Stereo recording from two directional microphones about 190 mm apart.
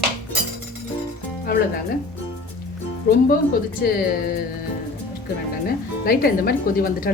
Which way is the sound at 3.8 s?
55° left (ahead or behind).